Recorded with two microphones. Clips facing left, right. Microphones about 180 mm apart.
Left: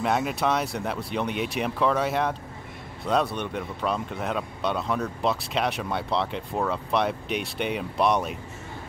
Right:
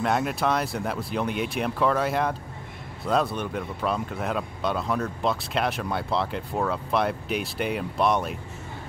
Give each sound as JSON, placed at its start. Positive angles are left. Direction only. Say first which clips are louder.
{"t": 0.0, "sound": "speech", "louder": "even", "side_deg": 0}